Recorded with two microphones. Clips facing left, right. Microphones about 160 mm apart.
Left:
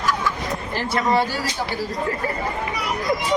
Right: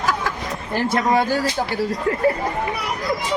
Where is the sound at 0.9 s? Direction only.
50° right (ahead or behind).